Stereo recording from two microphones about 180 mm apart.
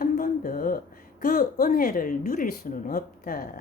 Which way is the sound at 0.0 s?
50° left (ahead or behind).